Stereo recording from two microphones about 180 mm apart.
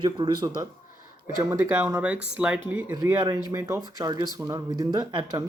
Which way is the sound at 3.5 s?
20° right (ahead or behind).